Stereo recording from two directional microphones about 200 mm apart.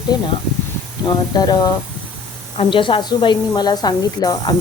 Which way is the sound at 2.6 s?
25° left (ahead or behind).